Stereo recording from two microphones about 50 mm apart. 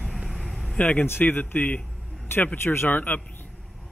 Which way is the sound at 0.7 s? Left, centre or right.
Left.